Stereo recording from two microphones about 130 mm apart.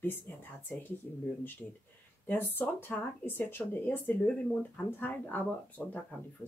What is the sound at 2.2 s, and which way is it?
Speech, 15° left (ahead or behind).